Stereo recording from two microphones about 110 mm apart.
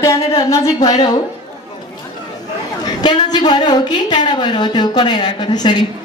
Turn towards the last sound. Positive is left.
turn(degrees=40)  # may be behind; listen again after turning